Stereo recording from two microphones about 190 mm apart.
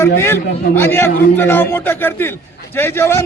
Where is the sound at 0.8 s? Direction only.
10° left (ahead or behind).